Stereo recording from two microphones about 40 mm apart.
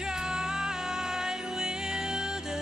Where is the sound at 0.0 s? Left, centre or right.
Centre.